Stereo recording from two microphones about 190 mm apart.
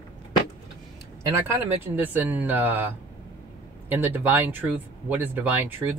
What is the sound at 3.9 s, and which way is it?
Speech, 10° right (ahead or behind).